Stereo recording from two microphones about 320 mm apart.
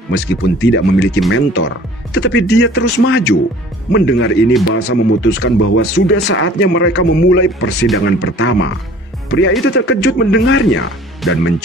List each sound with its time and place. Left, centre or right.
0.1 s speech: left